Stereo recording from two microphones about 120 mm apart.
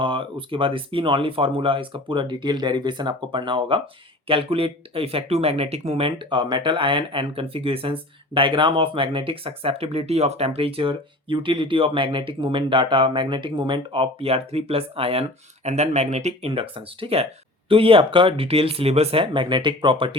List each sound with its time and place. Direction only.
0.0 s speech: 45° right (ahead or behind); by 16.5 s 70° right (ahead or behind)
16.5 s speech: 50° right (ahead or behind)